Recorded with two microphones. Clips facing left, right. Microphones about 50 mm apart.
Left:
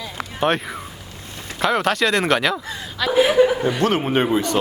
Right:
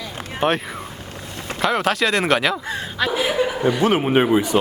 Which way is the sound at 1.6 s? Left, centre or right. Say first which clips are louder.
Left 1 dB; centre.